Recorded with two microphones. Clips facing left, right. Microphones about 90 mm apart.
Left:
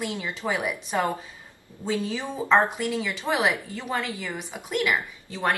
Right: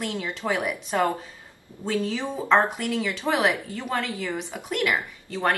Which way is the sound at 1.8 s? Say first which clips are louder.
Right 2 dB; 10° left (ahead or behind).